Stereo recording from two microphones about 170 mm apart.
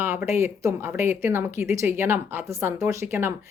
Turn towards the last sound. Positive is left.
turn(degrees=-15)  # may be behind; listen again after turning